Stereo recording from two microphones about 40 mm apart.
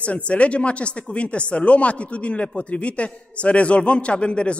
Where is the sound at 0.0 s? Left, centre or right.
Left.